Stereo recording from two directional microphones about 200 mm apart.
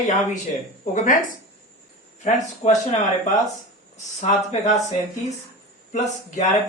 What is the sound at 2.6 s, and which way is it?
Speech, 30° left (ahead or behind).